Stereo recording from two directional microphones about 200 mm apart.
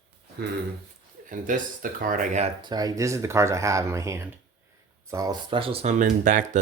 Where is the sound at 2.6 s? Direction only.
20° right (ahead or behind).